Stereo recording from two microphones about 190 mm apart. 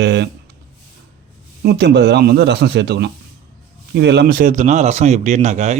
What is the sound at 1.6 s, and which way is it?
A man's voice, 60° right (ahead or behind).